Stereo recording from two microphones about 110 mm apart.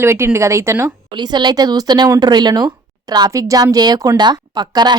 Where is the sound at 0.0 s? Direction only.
25° right (ahead or behind).